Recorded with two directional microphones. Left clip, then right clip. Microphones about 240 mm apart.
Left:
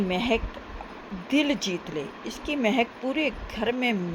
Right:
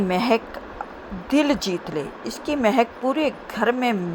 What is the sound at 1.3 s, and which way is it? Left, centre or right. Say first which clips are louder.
Speech: right 5 dB; right.